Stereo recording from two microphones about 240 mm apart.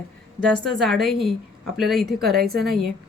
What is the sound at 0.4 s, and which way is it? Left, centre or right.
Speech, centre.